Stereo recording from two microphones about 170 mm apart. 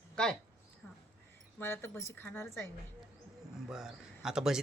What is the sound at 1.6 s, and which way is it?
A woman's voice, 15° left (ahead or behind).